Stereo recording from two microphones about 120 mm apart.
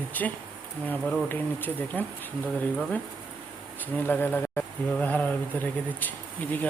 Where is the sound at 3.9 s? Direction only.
15° left (ahead or behind).